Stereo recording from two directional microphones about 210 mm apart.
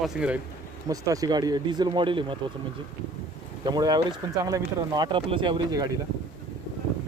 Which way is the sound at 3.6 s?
20° right (ahead or behind).